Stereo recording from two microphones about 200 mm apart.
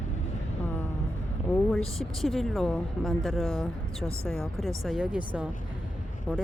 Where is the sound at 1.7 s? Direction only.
Centre (ahead or behind).